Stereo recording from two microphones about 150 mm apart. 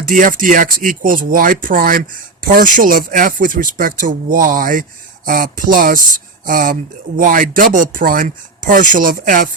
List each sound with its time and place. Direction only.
0.1 s speech: 60° right (ahead or behind)